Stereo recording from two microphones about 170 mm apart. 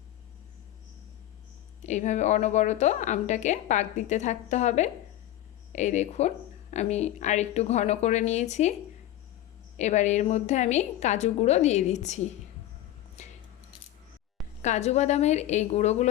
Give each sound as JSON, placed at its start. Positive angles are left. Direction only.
{"t": 1.9, "sound": "a woman's voice", "side_deg": 45}
{"t": 9.7, "sound": "a woman's voice", "side_deg": 45}
{"t": 13.2, "sound": "keys jangling", "side_deg": 45}
{"t": 14.6, "sound": "speech", "side_deg": 40}